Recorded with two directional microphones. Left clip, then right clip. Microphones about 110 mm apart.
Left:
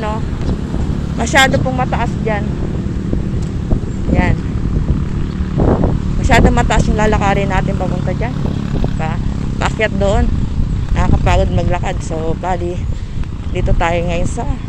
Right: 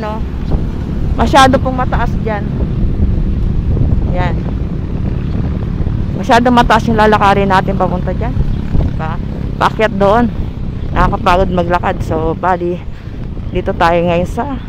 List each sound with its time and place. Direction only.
1.1 s speech: 40° right (ahead or behind)
1.8 s speech: 30° right (ahead or behind)
6.2 s speech: 50° right (ahead or behind)
9.6 s speech: 40° right (ahead or behind)
11.0 s speech: 60° right (ahead or behind)
13.6 s speech: 60° right (ahead or behind)